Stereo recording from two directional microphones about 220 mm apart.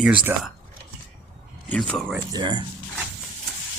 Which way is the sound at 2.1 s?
20° right (ahead or behind).